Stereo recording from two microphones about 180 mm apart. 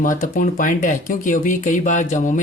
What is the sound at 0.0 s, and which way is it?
Speech, 50° left (ahead or behind).